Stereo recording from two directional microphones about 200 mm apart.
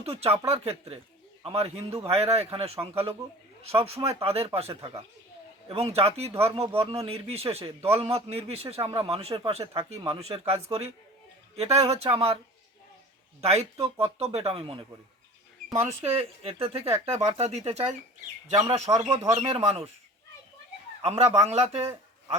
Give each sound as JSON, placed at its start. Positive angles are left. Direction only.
{"t": 0.0, "sound": "a man's voice", "side_deg": -30}
{"t": 13.4, "sound": "a man's voice", "side_deg": -30}
{"t": 21.0, "sound": "a man's voice", "side_deg": -30}